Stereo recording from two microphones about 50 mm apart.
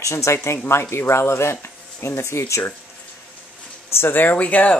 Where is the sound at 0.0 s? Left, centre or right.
Left.